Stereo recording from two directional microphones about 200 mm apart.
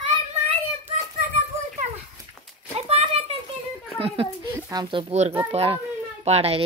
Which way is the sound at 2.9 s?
30° right (ahead or behind).